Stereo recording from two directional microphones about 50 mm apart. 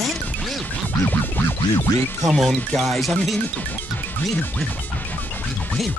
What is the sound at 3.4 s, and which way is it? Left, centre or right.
Music, left.